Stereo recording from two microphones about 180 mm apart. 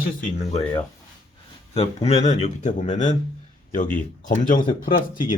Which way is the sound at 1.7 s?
35° left (ahead or behind).